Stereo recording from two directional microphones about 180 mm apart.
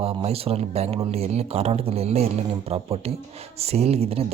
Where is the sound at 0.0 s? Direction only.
30° right (ahead or behind).